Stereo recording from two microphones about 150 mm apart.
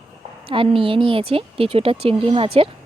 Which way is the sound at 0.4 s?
35° right (ahead or behind).